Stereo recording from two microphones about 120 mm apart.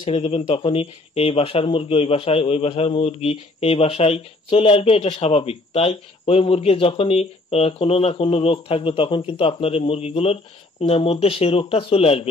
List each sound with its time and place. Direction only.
0.0 s speech: 55° left (ahead or behind)